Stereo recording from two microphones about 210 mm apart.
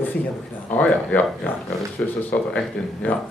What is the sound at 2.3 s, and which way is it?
Speech, 5° left (ahead or behind).